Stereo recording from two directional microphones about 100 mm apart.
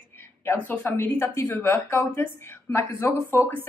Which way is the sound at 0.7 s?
20° left (ahead or behind).